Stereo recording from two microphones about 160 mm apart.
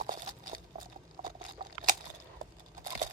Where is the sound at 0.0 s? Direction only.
60° right (ahead or behind).